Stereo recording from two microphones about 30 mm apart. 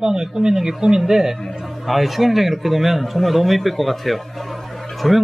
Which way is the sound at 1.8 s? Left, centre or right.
Centre.